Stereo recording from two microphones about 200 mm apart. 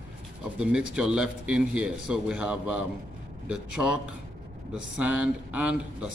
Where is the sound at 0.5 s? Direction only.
5° right (ahead or behind).